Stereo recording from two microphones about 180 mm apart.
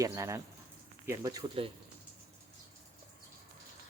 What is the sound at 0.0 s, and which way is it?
Speech, 20° right (ahead or behind).